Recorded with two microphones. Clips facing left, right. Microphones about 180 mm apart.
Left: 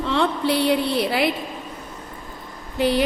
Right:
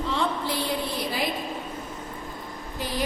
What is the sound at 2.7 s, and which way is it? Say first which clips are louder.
Speech: left 12 dB; 70° left (ahead or behind).